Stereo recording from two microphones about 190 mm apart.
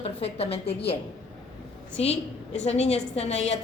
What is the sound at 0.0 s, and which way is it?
Speech, 30° left (ahead or behind).